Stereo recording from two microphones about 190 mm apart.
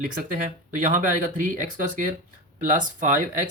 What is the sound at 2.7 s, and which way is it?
Speech, 45° right (ahead or behind).